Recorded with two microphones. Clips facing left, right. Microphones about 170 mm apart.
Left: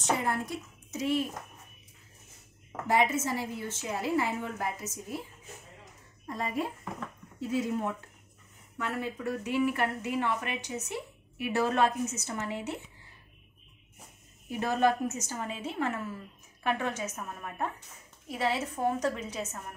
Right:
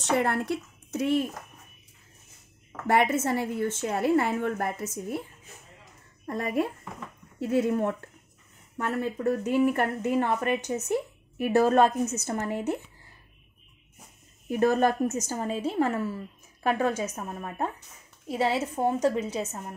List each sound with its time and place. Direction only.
0.2 s a woman's voice: 70° right (ahead or behind)
2.9 s a woman's voice: 60° right (ahead or behind)
6.2 s a woman's voice: 60° right (ahead or behind)
8.7 s a woman's voice: 45° right (ahead or behind)
14.5 s a woman's voice: 45° right (ahead or behind); by 19.7 s 30° right (ahead or behind)